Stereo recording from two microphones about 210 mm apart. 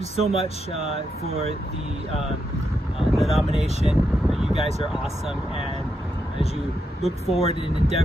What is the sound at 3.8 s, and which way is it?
Vehicle, centre (ahead or behind).